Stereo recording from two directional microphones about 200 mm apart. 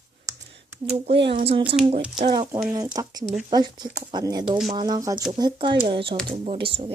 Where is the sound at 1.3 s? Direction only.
30° right (ahead or behind).